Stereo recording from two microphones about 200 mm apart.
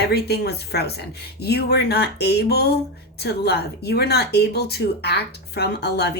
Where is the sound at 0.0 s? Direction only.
55° left (ahead or behind).